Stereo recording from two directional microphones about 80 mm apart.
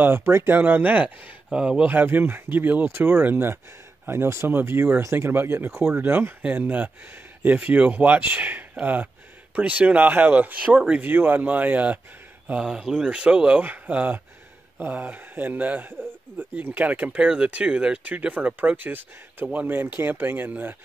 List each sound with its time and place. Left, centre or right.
0.0 s speech: right; by 1.9 s centre
1.9 s speech: right
12.4 s speech: centre